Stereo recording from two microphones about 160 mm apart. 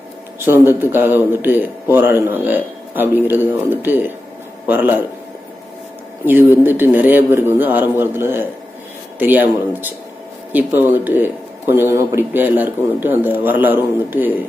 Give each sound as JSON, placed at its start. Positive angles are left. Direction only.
{"t": 0.3, "sound": "speech", "side_deg": -15}
{"t": 6.2, "sound": "speech", "side_deg": -10}